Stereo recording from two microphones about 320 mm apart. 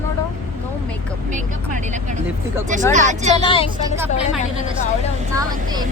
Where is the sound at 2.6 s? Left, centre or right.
Right.